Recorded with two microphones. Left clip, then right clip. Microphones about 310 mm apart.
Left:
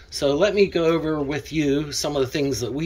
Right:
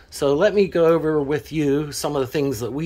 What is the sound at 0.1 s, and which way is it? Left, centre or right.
Speech, centre.